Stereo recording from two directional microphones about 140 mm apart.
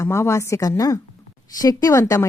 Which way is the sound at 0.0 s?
20° left (ahead or behind).